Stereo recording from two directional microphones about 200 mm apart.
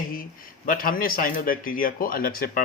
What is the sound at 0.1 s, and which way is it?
Speech, 45° left (ahead or behind).